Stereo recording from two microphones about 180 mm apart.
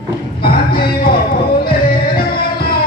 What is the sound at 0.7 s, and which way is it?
Music, 55° left (ahead or behind).